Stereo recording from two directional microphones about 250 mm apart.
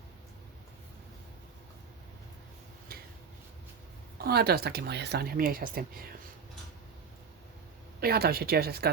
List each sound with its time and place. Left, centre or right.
2.9 s a sound: right
4.2 s speech: right
8.0 s speech: right